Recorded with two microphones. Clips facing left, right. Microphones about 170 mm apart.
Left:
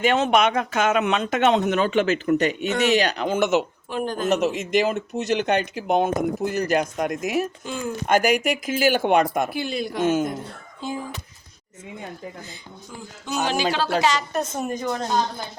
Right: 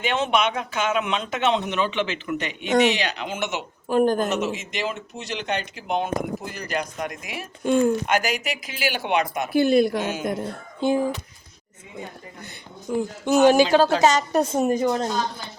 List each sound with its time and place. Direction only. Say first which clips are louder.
0.0 s speech: left 4 dB; 45° left (ahead or behind)
3.8 s a woman's voice: right 7 dB; 45° right (ahead or behind)
4.5 s speech: left 8 dB; 50° left (ahead or behind)
7.6 s speech: right 11 dB; 55° right (ahead or behind)
8.0 s speech: left 5 dB; 50° left (ahead or behind)
9.5 s a woman's voice: right 9 dB; 50° right (ahead or behind)
10.0 s speech: left 7 dB; 50° left (ahead or behind)
10.8 s speech: right 9 dB; 65° right (ahead or behind)
12.9 s a woman's voice: right 10 dB; 60° right (ahead or behind); by 14.4 s 45° right (ahead or behind)
14.5 s speech: right 6 dB; 30° right (ahead or behind)